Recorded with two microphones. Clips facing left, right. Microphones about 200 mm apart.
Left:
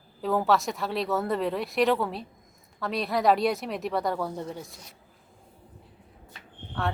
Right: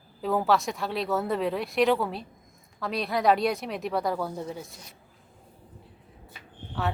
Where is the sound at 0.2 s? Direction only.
Centre (ahead or behind).